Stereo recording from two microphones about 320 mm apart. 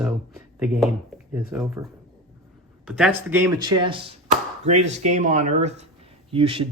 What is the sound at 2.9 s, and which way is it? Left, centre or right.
Speech, centre.